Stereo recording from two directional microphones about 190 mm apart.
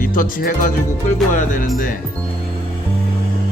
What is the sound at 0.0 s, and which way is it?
Speech, 45° left (ahead or behind).